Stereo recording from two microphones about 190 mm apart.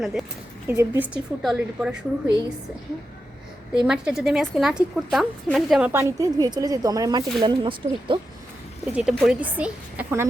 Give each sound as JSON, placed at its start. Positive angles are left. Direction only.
{"t": 0.0, "sound": "a woman's voice", "side_deg": -5}
{"t": 3.8, "sound": "a woman's voice", "side_deg": -5}
{"t": 5.9, "sound": "speech", "side_deg": -15}
{"t": 9.0, "sound": "a woman's voice", "side_deg": 0}